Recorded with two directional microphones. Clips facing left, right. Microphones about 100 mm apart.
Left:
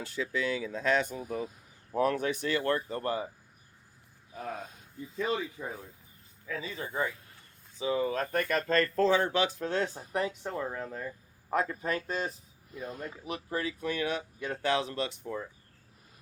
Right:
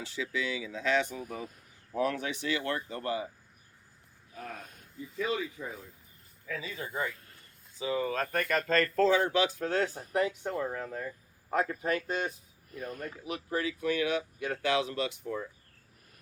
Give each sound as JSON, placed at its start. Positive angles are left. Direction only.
{"t": 0.0, "sound": "speech", "side_deg": 45}
{"t": 1.2, "sound": "speech", "side_deg": 20}
{"t": 2.0, "sound": "speech", "side_deg": 45}
{"t": 4.4, "sound": "speech", "side_deg": 20}
{"t": 5.2, "sound": "speech", "side_deg": 30}
{"t": 12.7, "sound": "speech", "side_deg": 20}
{"t": 13.2, "sound": "speech", "side_deg": 35}